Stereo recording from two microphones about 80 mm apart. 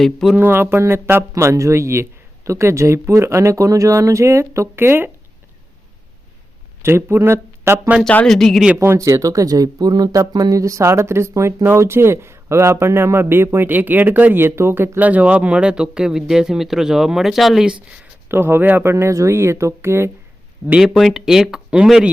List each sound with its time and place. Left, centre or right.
0.0 s speech: centre
0.3 s speech: right
6.8 s speech: right
8.1 s speech: centre
8.8 s speech: right; by 17.7 s centre
18.3 s speech: right
20.7 s speech: centre